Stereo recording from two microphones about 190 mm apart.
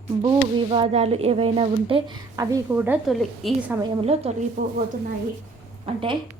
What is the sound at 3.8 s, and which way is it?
Speech, 30° right (ahead or behind).